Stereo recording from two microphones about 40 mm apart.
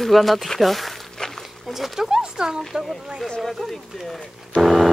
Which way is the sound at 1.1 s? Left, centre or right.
Centre.